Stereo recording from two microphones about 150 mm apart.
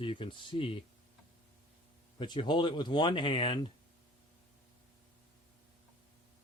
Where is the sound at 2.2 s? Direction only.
35° left (ahead or behind).